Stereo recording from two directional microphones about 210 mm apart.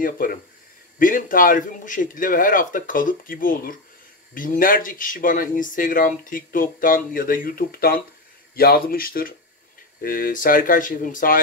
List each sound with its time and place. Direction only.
0.0 s speech: 40° left (ahead or behind)